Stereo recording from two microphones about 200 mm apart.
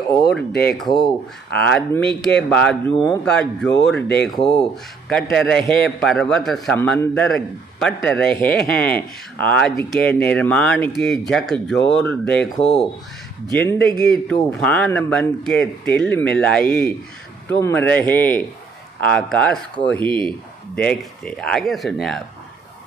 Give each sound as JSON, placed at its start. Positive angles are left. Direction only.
{"t": 0.5, "sound": "speech", "side_deg": 50}
{"t": 0.7, "sound": "a man's voice", "side_deg": 0}